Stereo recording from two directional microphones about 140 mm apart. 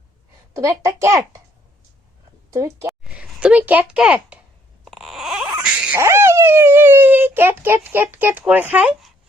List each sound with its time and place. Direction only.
0.5 s a child's voice: 20° right (ahead or behind)
2.5 s a child's voice: 20° right (ahead or behind)
3.0 s speech: 5° right (ahead or behind)
4.9 s a sound: centre (ahead or behind)
5.6 s speech: 10° right (ahead or behind)